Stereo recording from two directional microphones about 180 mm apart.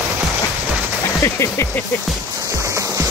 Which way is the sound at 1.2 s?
15° left (ahead or behind).